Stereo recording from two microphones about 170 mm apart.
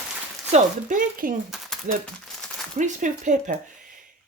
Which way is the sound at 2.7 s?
45° right (ahead or behind).